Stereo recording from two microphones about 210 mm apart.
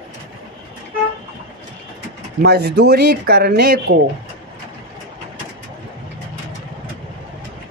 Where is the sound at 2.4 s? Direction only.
50° right (ahead or behind).